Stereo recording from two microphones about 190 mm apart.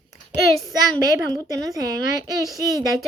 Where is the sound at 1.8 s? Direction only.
20° right (ahead or behind).